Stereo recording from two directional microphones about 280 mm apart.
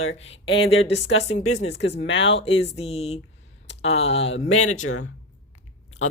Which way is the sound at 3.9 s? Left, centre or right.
Left.